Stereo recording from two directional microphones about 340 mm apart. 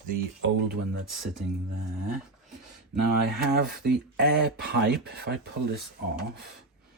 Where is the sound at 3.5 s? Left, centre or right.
Right.